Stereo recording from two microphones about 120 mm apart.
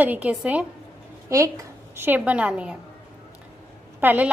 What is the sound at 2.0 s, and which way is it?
Speech, 15° right (ahead or behind).